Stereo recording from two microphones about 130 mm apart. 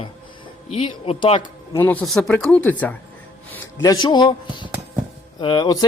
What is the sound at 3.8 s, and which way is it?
Speech, 30° left (ahead or behind).